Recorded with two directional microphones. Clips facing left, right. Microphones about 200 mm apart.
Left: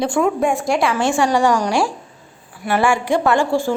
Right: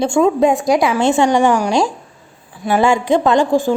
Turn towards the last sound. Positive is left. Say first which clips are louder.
# right 3 dB
turn(degrees=-15)  # may be behind; listen again after turning